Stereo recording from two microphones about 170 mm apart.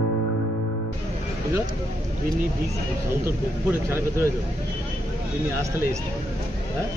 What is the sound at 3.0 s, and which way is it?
Speech, 15° right (ahead or behind).